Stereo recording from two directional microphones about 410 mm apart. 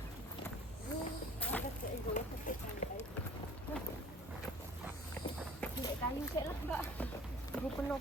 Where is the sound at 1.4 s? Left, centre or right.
Centre.